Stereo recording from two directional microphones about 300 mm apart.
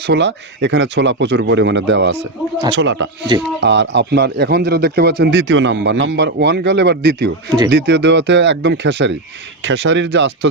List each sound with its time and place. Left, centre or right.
0.1 s speech: right